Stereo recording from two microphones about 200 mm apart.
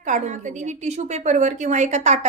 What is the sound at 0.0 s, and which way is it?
A woman's voice, 40° right (ahead or behind).